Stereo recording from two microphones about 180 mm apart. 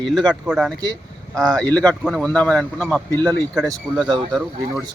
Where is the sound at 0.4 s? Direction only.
5° right (ahead or behind).